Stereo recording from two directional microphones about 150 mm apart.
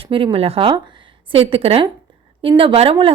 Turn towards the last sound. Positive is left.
turn(degrees=-35)  # may be behind; listen again after turning